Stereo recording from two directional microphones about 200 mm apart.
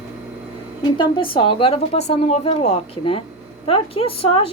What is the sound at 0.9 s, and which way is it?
A woman's voice, 25° left (ahead or behind).